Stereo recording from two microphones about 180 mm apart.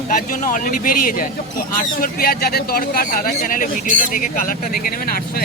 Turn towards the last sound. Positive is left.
turn(degrees=50)  # may be behind; listen again after turning